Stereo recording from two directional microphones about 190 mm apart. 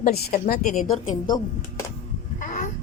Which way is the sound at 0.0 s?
50° left (ahead or behind).